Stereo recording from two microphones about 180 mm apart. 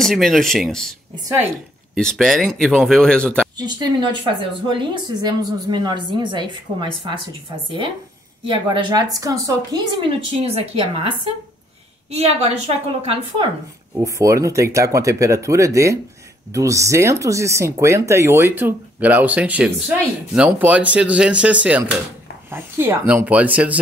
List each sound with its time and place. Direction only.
0.0 s speech: centre (ahead or behind)
2.0 s speech: 5° left (ahead or behind)
3.5 s a woman's voice: 20° right (ahead or behind)
8.5 s a woman's voice: 25° right (ahead or behind)
12.1 s a woman's voice: 35° right (ahead or behind)
13.9 s speech: 15° right (ahead or behind)